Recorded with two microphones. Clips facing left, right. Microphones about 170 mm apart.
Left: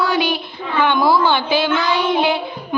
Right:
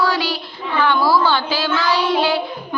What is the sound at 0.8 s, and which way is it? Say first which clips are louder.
Speech: left 1 dB; 20° left (ahead or behind).